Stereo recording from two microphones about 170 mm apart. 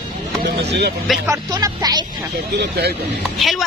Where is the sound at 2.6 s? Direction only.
70° right (ahead or behind).